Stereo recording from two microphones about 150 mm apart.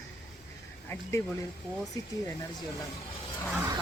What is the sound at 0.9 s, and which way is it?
Speech, 20° left (ahead or behind).